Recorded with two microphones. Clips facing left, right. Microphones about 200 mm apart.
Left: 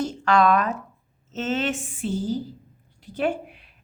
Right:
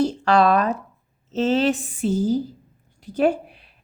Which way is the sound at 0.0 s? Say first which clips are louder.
Right 3 dB; 35° right (ahead or behind).